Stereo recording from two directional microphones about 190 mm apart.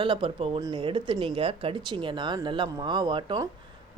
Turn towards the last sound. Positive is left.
turn(degrees=-25)  # may be behind; listen again after turning